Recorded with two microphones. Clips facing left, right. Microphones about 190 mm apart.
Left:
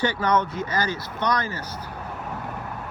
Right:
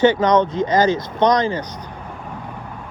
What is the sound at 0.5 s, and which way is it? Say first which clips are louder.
Speech: right 10 dB; 10° left (ahead or behind).